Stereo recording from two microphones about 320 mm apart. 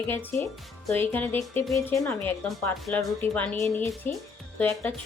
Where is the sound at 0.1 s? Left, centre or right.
Centre.